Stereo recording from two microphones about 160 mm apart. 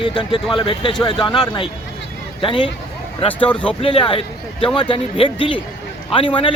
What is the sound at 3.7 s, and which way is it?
Speech, 35° left (ahead or behind).